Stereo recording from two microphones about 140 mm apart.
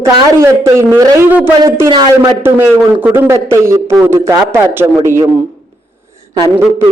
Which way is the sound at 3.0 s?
20° right (ahead or behind).